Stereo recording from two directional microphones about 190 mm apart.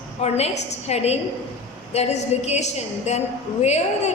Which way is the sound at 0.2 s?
35° left (ahead or behind).